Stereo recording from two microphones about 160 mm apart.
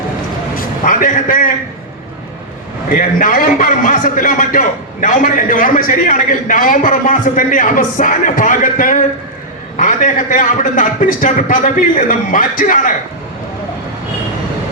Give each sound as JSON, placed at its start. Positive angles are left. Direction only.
{"t": 0.5, "sound": "a man's voice", "side_deg": 55}
{"t": 2.9, "sound": "a man's voice", "side_deg": 55}